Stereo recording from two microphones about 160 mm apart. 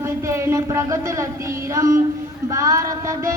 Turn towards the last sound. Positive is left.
turn(degrees=-20)  # may be behind; listen again after turning